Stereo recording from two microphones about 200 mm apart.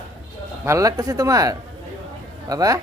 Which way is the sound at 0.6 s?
15° right (ahead or behind).